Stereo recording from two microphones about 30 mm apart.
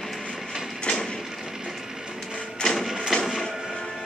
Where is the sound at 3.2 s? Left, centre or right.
Centre.